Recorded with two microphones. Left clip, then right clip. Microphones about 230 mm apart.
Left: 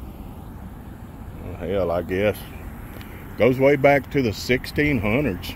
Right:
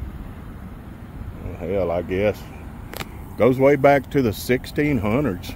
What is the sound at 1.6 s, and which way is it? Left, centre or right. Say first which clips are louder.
Speech: even; centre.